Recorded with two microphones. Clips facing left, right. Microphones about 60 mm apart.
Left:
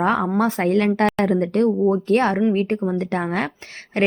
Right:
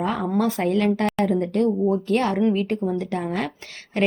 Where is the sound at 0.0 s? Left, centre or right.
Left.